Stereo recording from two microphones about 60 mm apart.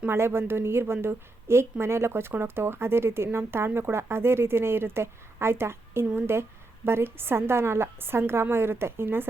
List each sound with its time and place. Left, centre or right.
0.1 s a woman's voice: right